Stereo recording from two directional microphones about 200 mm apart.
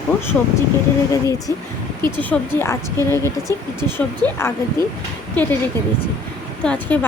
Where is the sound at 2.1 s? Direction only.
10° left (ahead or behind).